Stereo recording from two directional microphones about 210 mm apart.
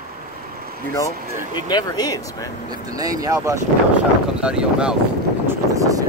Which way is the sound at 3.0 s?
15° right (ahead or behind).